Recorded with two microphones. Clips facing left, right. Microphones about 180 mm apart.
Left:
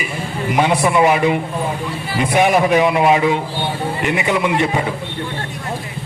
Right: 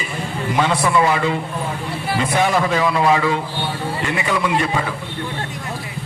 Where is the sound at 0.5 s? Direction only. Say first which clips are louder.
Left 2 dB; 15° left (ahead or behind).